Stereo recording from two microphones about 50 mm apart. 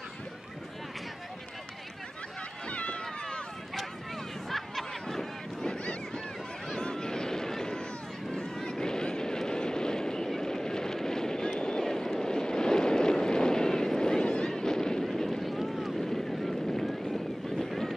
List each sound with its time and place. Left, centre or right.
2.7 s run: left
4.5 s snicker: centre
6.8 s a sound: centre
8.6 s vehicle: centre
17.6 s boat: centre